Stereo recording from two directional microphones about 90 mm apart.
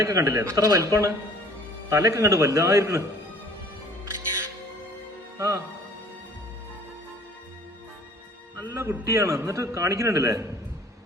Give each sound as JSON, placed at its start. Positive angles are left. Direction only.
{"t": 0.0, "sound": "a man's voice", "side_deg": -35}
{"t": 5.4, "sound": "music", "side_deg": -35}
{"t": 8.5, "sound": "a man's voice", "side_deg": -35}